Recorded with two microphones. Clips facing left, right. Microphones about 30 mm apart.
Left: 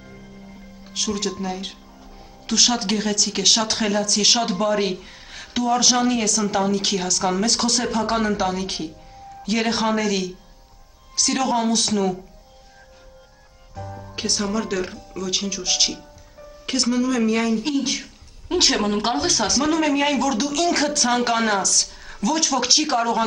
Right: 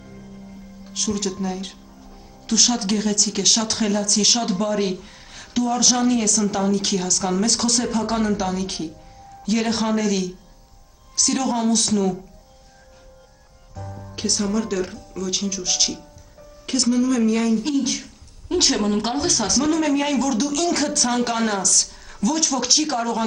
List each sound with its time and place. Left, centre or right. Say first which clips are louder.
0.8 s speech: even; centre
13.7 s speech: left 2 dB; centre